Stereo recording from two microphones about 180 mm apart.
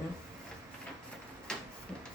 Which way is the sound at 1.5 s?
5° left (ahead or behind).